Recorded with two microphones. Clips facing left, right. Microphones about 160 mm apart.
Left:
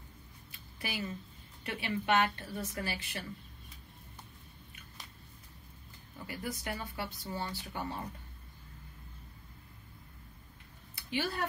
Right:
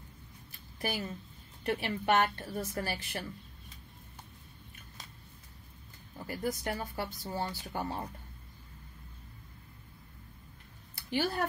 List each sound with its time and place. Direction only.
0.7 s a woman's voice: 45° right (ahead or behind)
6.1 s speech: 45° right (ahead or behind)
11.1 s speech: 45° right (ahead or behind)